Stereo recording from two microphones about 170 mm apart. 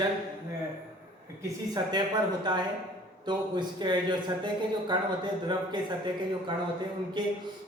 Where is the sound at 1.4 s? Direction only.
25° right (ahead or behind).